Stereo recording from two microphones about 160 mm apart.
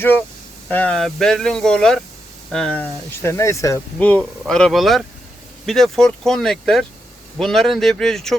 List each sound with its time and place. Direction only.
0.7 s speech: 10° left (ahead or behind)
3.9 s speech: 10° left (ahead or behind)